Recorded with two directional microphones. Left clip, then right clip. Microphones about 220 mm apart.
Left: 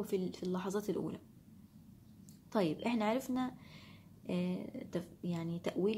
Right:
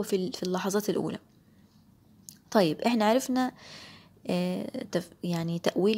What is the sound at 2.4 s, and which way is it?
Speech, 40° right (ahead or behind).